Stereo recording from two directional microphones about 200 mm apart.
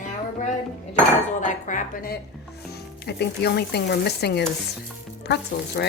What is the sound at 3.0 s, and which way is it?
Speech, 55° left (ahead or behind).